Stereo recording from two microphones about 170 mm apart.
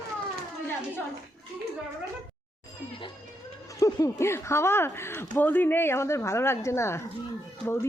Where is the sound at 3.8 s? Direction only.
15° left (ahead or behind).